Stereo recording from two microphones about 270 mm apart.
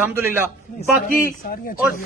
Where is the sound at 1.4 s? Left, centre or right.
Left.